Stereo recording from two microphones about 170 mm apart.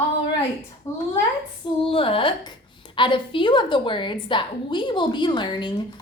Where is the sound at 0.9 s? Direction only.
15° left (ahead or behind).